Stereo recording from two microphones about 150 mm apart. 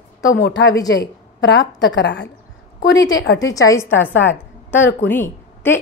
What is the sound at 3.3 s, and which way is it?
A woman's voice, 25° left (ahead or behind).